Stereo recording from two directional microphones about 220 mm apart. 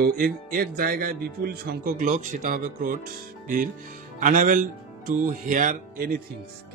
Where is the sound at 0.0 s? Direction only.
40° right (ahead or behind).